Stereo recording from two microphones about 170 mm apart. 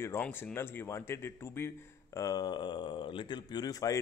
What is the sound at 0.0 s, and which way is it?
Speech, 15° left (ahead or behind).